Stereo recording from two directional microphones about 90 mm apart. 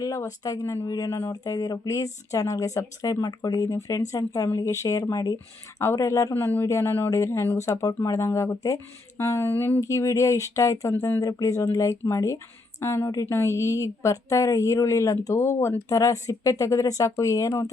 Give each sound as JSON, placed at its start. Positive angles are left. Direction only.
{"t": 0.0, "sound": "speech", "side_deg": 40}
{"t": 9.8, "sound": "speech", "side_deg": 35}